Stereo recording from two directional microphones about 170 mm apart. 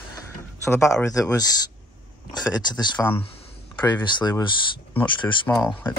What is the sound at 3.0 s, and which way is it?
Speech, 10° left (ahead or behind).